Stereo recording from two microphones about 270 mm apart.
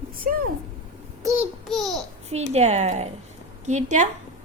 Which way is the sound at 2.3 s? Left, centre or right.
Right.